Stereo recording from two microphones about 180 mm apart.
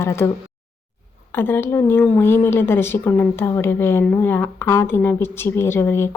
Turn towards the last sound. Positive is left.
turn(degrees=15)  # may be behind; listen again after turning